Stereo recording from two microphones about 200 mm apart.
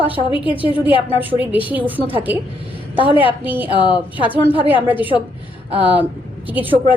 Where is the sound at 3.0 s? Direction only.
25° left (ahead or behind).